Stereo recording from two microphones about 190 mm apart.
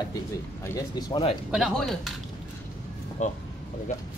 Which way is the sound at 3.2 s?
40° left (ahead or behind).